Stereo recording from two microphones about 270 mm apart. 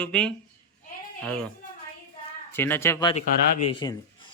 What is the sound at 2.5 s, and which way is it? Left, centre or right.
A man's voice, centre.